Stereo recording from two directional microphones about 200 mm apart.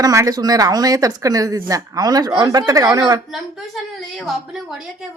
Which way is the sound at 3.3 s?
Centre (ahead or behind).